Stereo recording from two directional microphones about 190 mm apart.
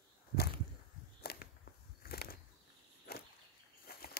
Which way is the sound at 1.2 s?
55° left (ahead or behind).